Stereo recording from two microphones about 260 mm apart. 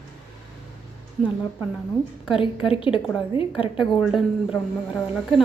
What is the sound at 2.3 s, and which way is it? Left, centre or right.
A woman's voice, centre.